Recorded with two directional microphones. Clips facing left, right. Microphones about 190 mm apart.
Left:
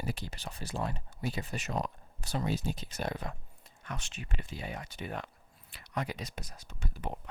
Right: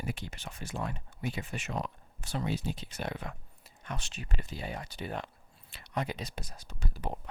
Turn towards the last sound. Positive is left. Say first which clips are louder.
# right 1 dB
turn(degrees=-35)  # may be behind; listen again after turning